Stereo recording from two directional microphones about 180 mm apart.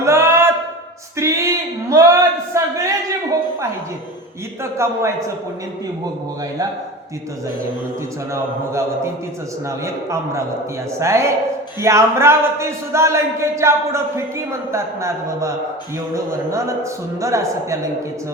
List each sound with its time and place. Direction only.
0.0 s a sound: 15° right (ahead or behind)
4.6 s a man's voice: 15° right (ahead or behind)
9.6 s a man's voice: 15° right (ahead or behind)